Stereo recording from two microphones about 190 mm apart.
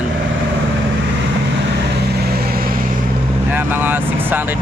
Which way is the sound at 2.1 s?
55° right (ahead or behind).